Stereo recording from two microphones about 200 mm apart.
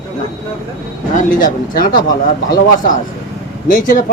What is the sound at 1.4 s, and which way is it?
Speech, 45° left (ahead or behind).